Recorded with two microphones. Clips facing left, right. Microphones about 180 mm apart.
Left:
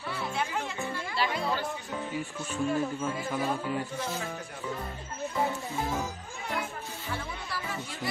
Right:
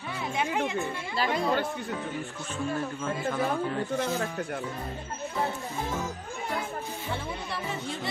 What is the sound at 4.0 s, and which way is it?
Speech, 60° right (ahead or behind).